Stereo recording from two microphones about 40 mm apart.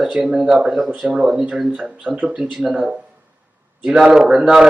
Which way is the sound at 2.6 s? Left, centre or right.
Centre.